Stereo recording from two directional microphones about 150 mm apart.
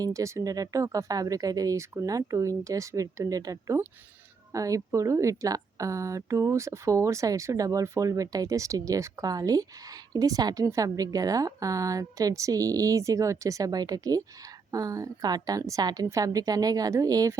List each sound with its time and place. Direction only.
0.0 s a woman's voice: 20° right (ahead or behind)